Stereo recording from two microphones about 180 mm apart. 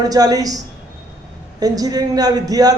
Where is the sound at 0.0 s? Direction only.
20° right (ahead or behind).